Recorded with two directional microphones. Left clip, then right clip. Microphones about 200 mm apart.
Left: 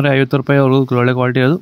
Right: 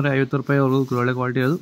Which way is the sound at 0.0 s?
45° left (ahead or behind).